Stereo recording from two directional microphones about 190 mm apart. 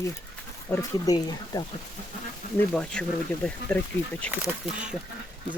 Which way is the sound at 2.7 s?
5° left (ahead or behind).